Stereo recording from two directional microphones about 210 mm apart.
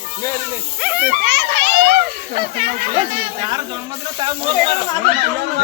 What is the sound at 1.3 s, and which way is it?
Children playing, 55° right (ahead or behind).